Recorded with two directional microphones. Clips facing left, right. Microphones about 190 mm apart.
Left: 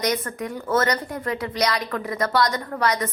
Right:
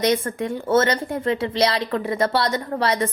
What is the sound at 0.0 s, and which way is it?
A woman's voice, 25° right (ahead or behind).